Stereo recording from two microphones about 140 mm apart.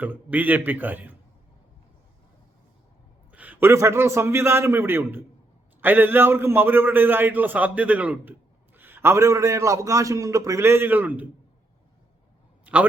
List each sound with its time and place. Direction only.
0.0 s a man's voice: 10° right (ahead or behind)
3.3 s a man's voice: 10° right (ahead or behind)
12.7 s a sound: 10° right (ahead or behind)